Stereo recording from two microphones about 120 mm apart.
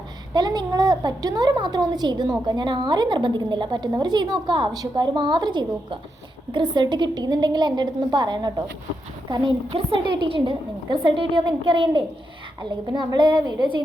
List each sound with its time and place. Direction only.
0.3 s a child's voice: 35° right (ahead or behind)
9.6 s a woman's voice: 50° right (ahead or behind)